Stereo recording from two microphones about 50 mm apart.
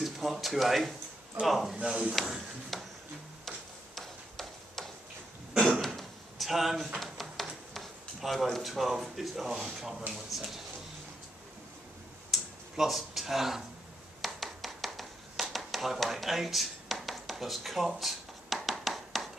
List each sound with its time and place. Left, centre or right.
0.0 s speech: centre
1.8 s speech: centre
2.2 s speech: centre
3.4 s tick-tock: centre
5.8 s a sound: centre
8.5 s speech: centre
12.3 s a sound: centre